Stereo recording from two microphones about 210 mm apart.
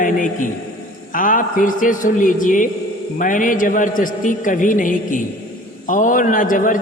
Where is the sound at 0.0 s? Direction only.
40° left (ahead or behind).